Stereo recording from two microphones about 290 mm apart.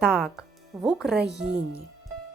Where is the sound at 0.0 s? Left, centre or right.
Centre.